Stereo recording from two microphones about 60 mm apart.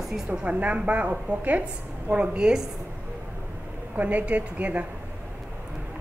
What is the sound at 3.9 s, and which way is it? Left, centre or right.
Speech, right.